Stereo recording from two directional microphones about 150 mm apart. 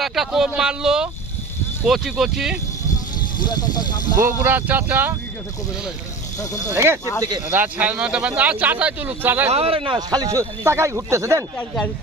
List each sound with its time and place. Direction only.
0.0 s speech: centre (ahead or behind)
3.3 s speech: 30° left (ahead or behind)
4.3 s speech: 10° right (ahead or behind)
6.7 s speech: 15° right (ahead or behind)
7.2 s speech: 25° right (ahead or behind)
7.5 s speech: 10° right (ahead or behind)
9.5 s speech: 40° right (ahead or behind); by 11.4 s 20° right (ahead or behind)
11.5 s speech: 10° left (ahead or behind)